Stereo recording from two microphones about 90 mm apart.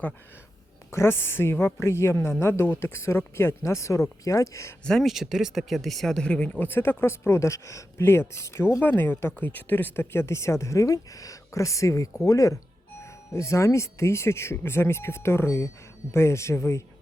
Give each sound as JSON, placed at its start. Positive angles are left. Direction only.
{"t": 0.9, "sound": "speech", "side_deg": 30}
{"t": 4.9, "sound": "speech", "side_deg": 0}